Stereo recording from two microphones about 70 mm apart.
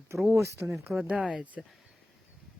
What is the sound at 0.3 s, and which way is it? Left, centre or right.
Speech, right.